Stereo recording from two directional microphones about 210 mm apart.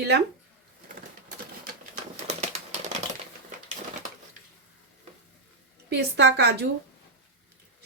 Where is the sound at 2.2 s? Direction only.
35° right (ahead or behind).